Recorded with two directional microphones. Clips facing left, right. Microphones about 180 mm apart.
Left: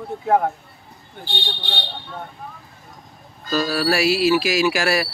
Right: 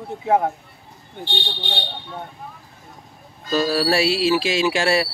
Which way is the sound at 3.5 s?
30° right (ahead or behind).